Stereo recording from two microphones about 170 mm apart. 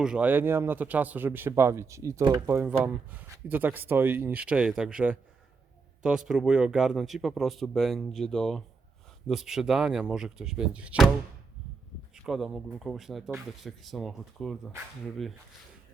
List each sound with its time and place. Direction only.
0.0 s speech: 5° right (ahead or behind)
12.1 s speech: centre (ahead or behind)